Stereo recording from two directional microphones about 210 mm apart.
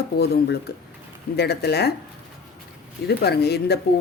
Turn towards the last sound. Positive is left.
turn(degrees=50)  # may be behind; listen again after turning